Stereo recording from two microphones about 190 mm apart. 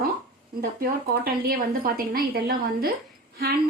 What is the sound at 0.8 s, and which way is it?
A woman's voice, 50° right (ahead or behind).